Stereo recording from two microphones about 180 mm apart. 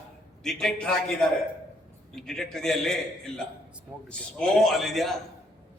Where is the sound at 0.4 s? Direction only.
Centre (ahead or behind).